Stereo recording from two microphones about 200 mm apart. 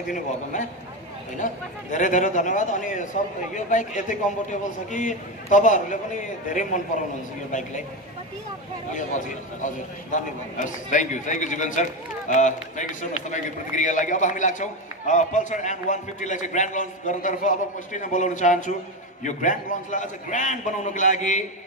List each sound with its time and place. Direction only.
0.1 s a man's voice: 40° left (ahead or behind)
8.9 s a man's voice: 40° left (ahead or behind)